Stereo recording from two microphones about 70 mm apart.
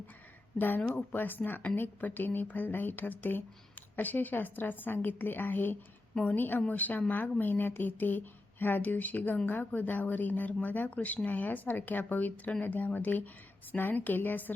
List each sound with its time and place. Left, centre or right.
1.1 s speech: left